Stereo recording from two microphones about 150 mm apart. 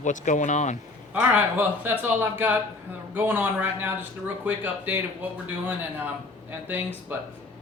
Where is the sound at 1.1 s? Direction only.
10° right (ahead or behind).